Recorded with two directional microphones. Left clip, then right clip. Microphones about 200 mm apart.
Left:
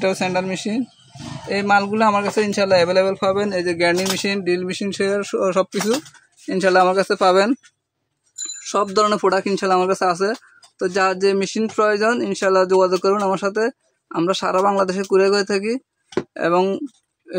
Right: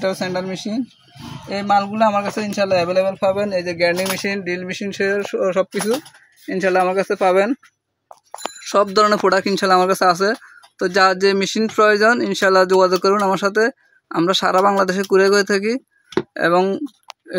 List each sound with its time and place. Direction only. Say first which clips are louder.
0.0 s a man's voice: left 2 dB; 20° left (ahead or behind)
8.5 s speech: right 3 dB; 15° right (ahead or behind)